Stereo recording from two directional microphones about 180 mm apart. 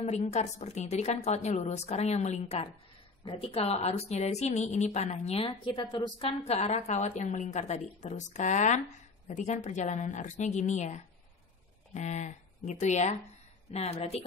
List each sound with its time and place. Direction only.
0.0 s a woman's voice: 40° left (ahead or behind)
5.5 s a woman's voice: 25° left (ahead or behind)